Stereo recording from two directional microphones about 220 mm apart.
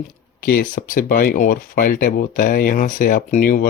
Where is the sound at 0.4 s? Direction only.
40° left (ahead or behind).